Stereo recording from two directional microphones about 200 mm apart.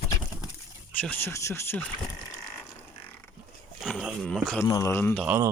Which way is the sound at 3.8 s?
Centre (ahead or behind).